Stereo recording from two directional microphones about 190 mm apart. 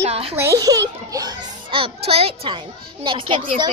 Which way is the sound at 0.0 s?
30° right (ahead or behind).